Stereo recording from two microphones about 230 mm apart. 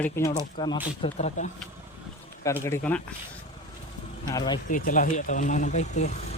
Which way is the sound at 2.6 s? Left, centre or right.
Centre.